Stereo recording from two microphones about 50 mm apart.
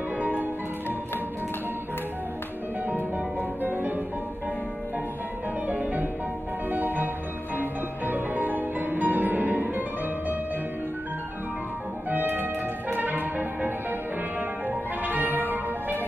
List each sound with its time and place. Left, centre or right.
0.2 s music: right
3.3 s music: right
5.7 s music: right
12.1 s music: right